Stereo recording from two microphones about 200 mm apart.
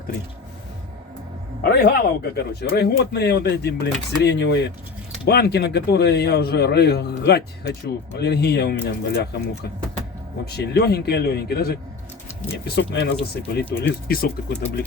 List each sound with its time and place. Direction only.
1.6 s speech: 50° left (ahead or behind)
10.5 s speech: 55° left (ahead or behind)